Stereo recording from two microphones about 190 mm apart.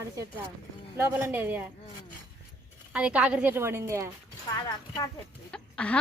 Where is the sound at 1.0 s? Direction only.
10° right (ahead or behind).